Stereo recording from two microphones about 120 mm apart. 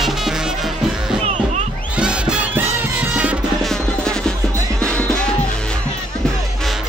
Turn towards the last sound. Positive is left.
turn(degrees=10)  # may be behind; listen again after turning